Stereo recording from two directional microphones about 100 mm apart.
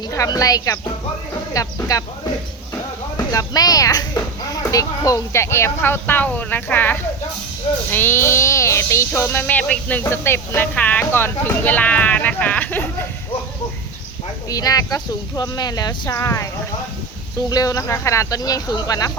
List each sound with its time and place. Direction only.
0.1 s speech: 35° left (ahead or behind)
3.2 s speech: 35° left (ahead or behind); by 13.1 s 20° left (ahead or behind)
14.5 s speech: 35° left (ahead or behind)
17.5 s speech: 35° left (ahead or behind)